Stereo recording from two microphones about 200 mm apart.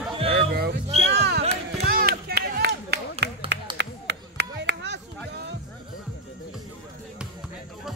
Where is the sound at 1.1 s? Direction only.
55° right (ahead or behind).